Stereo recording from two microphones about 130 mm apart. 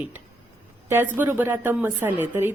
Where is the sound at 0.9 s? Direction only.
15° right (ahead or behind).